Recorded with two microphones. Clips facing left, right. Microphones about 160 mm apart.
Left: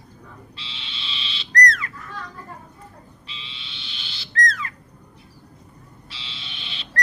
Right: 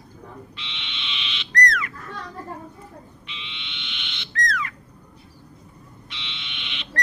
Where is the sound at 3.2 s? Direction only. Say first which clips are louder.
Right 2 dB; 35° left (ahead or behind).